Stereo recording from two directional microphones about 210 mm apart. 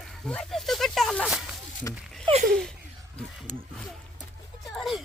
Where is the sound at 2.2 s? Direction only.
30° right (ahead or behind).